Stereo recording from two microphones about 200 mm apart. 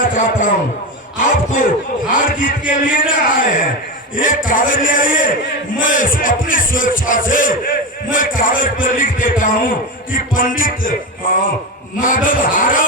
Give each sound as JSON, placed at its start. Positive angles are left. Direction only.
{"t": 0.0, "sound": "a sound", "side_deg": 40}
{"t": 1.2, "sound": "a man's voice", "side_deg": 40}
{"t": 11.9, "sound": "a man's voice", "side_deg": 40}